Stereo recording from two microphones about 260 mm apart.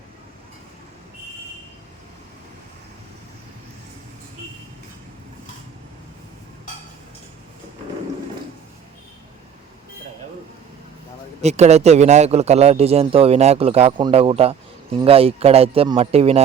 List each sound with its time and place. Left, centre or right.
11.4 s a man's voice: right